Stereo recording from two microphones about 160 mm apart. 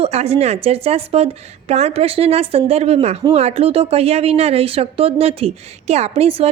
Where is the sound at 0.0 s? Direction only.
40° right (ahead or behind).